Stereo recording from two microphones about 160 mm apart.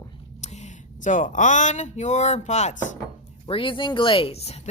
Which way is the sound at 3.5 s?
35° left (ahead or behind).